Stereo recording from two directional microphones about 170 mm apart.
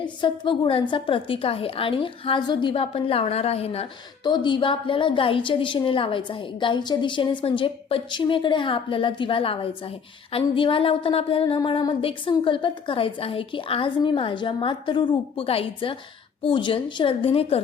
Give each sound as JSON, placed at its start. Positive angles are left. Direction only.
{"t": 0.0, "sound": "a woman's voice", "side_deg": 30}